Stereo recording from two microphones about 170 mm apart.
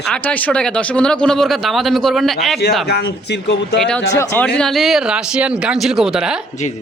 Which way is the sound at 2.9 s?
80° left.